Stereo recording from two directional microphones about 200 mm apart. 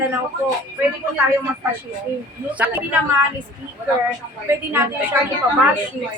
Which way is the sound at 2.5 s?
5° right (ahead or behind).